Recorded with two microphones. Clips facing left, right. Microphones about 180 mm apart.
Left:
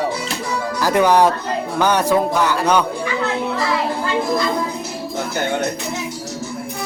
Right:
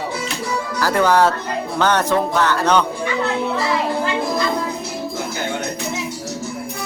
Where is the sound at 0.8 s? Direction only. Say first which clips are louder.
Left 1 dB; 15° left (ahead or behind).